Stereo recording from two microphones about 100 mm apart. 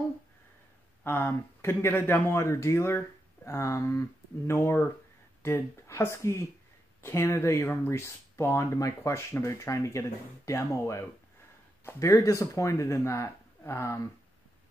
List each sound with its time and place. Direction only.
1.0 s speech: 25° left (ahead or behind)